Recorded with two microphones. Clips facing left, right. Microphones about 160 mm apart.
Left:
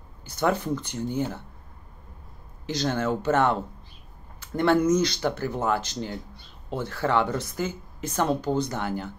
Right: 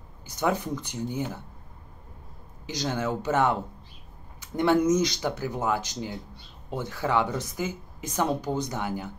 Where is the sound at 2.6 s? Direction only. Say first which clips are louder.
Left 3 dB; 15° right (ahead or behind).